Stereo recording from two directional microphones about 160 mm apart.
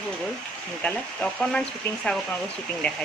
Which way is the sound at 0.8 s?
5° left (ahead or behind).